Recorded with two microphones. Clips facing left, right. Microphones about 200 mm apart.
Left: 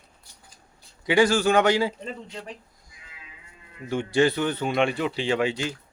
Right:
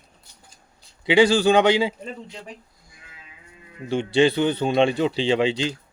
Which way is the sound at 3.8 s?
25° right (ahead or behind).